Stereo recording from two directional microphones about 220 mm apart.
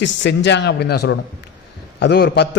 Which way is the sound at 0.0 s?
55° left (ahead or behind).